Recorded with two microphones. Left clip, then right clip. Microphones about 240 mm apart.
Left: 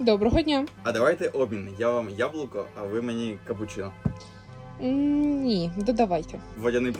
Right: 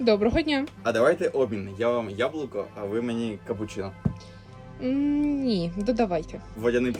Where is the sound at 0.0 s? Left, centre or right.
Centre.